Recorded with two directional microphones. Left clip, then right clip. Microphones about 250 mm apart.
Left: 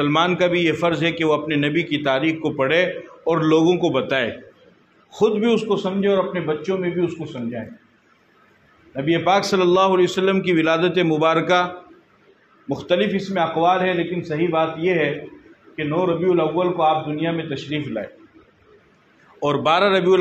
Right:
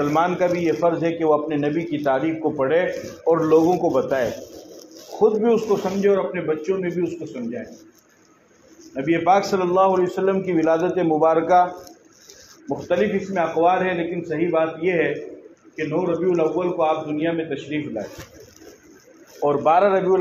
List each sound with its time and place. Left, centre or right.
0.0 s a man's voice: left
8.9 s a man's voice: left
12.6 s a man's voice: left
16.3 s a man's voice: left
19.4 s a man's voice: left